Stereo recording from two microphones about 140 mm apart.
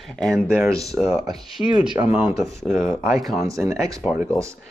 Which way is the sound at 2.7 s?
15° right (ahead or behind).